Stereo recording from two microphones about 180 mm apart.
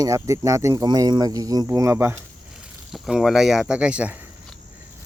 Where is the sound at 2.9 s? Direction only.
Centre (ahead or behind).